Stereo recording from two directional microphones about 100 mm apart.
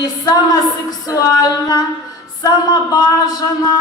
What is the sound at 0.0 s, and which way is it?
A woman's voice, 40° left (ahead or behind).